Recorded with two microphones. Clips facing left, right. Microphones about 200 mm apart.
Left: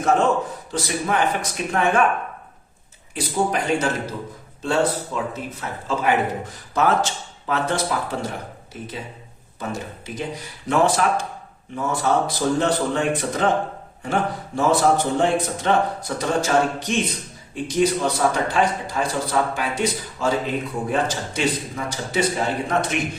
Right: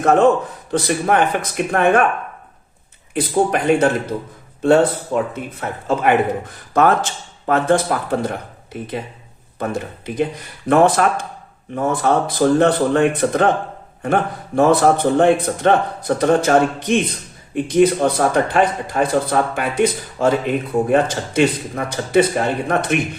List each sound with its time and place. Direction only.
0.0 s a man's voice: 60° right (ahead or behind)
3.2 s speech: 55° right (ahead or behind)